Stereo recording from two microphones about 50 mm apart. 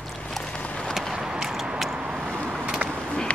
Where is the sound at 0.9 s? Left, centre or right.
Centre.